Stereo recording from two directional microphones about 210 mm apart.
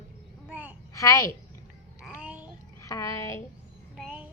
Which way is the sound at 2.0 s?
5° right (ahead or behind).